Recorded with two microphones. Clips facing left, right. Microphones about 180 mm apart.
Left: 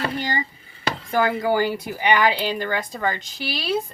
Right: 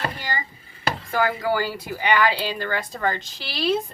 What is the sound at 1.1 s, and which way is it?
Speech, 20° left (ahead or behind).